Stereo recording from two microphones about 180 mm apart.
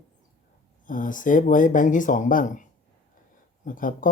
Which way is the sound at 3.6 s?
50° left (ahead or behind).